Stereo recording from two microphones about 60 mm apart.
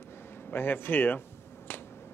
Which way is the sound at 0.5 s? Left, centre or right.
Left.